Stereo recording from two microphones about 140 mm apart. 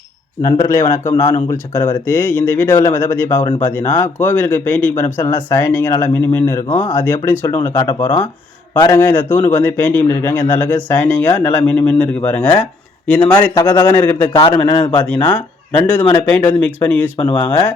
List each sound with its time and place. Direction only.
0.6 s a man's voice: 20° left (ahead or behind)
14.4 s a man's voice: 35° left (ahead or behind)
15.0 s speech: 10° left (ahead or behind)